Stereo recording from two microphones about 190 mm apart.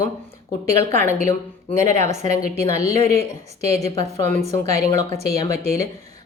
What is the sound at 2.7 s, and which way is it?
Speech, 35° right (ahead or behind).